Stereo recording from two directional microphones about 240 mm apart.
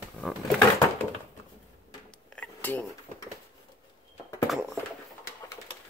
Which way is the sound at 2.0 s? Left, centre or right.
Centre.